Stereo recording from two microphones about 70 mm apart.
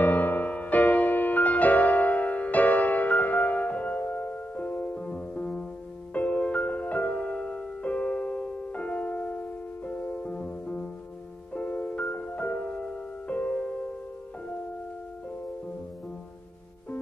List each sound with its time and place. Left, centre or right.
0.0 s music: left